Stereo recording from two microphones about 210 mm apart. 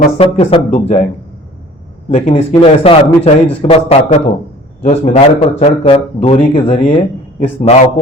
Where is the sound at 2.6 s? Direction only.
25° left (ahead or behind).